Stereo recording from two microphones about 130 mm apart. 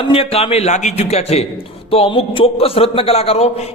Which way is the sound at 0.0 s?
45° left (ahead or behind).